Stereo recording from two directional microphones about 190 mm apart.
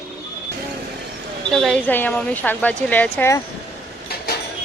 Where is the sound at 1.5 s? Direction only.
Centre (ahead or behind).